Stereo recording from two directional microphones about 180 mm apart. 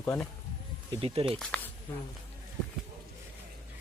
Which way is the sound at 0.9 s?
30° right (ahead or behind).